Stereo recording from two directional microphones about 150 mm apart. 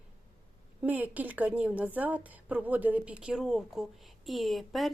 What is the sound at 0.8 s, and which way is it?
A woman's voice, 10° right (ahead or behind).